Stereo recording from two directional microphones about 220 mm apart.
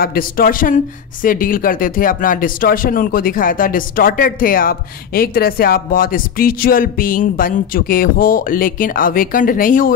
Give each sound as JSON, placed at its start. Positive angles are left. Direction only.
{"t": 0.0, "sound": "speech", "side_deg": 40}